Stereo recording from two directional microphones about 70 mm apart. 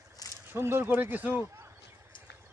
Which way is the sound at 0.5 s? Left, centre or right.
Right.